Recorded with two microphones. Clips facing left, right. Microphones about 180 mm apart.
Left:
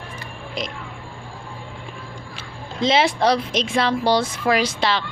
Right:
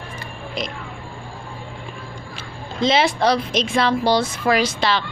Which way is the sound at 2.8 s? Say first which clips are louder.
Even; 25° left (ahead or behind).